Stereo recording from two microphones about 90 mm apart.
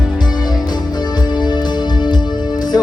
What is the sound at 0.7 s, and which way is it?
Music, 50° left (ahead or behind).